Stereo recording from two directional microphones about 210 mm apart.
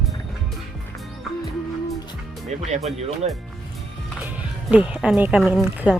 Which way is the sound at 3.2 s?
30° right (ahead or behind).